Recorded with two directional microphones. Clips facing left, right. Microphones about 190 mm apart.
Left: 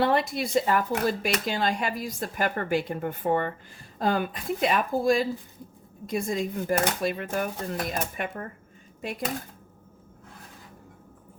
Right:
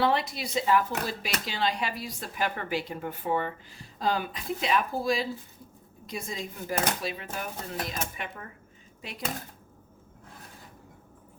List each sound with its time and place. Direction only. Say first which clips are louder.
0.0 s speech: left 3 dB; 50° left (ahead or behind)